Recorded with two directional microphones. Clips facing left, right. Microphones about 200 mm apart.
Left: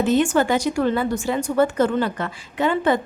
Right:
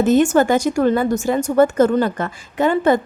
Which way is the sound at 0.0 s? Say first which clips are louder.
Right 4 dB; 45° right (ahead or behind).